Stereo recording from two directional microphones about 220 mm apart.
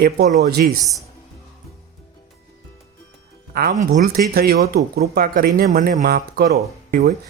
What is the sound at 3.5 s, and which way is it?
Speech, 40° right (ahead or behind).